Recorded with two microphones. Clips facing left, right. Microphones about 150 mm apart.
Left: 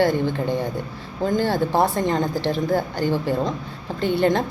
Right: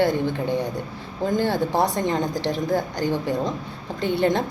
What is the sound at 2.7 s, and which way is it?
Speech, 5° left (ahead or behind).